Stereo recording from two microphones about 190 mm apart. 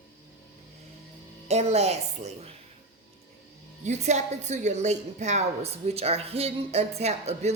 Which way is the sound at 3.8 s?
35° right (ahead or behind).